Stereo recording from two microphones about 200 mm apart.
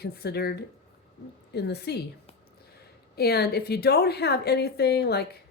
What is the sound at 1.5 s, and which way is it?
Speech, 55° left (ahead or behind).